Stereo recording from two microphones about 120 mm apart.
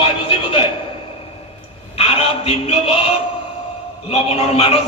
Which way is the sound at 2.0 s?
55° left (ahead or behind).